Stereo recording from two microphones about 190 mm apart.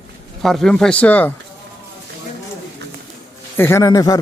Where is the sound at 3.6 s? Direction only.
15° left (ahead or behind).